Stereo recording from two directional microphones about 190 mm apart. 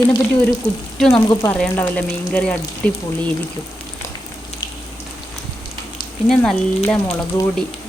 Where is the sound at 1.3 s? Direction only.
15° left (ahead or behind).